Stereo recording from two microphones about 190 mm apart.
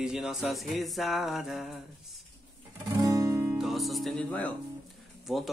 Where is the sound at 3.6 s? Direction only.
Centre (ahead or behind).